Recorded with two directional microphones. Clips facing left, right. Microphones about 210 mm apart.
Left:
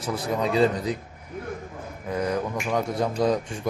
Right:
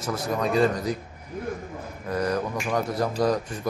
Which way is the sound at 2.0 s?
5° left (ahead or behind).